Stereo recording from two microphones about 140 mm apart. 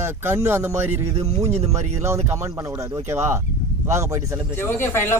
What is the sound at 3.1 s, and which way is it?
Speech, 20° right (ahead or behind).